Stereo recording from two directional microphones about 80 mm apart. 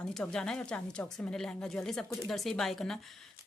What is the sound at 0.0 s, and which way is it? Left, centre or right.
Speech, centre.